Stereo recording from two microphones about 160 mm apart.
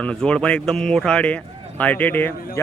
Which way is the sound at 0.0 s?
5° left (ahead or behind).